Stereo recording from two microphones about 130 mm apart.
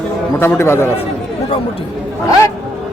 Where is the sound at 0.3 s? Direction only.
15° left (ahead or behind).